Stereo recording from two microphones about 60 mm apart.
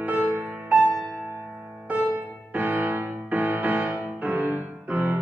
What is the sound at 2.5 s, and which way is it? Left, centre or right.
Music, right.